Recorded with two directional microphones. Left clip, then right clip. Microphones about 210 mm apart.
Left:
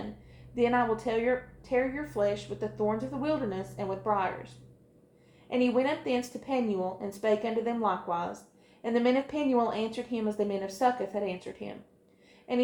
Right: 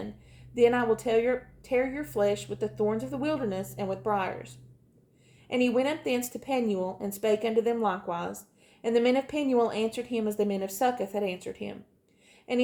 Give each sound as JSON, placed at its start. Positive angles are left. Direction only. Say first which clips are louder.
{"t": 0.5, "sound": "a woman's voice", "louder": "right 3 dB", "side_deg": -50}